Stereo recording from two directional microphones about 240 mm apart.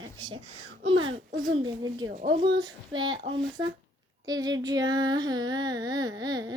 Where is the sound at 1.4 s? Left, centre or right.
Centre.